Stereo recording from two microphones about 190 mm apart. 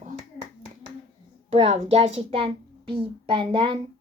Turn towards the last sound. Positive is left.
turn(degrees=-30)  # may be behind; listen again after turning